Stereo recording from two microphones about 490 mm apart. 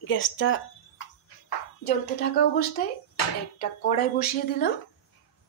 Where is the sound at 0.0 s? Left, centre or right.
Left.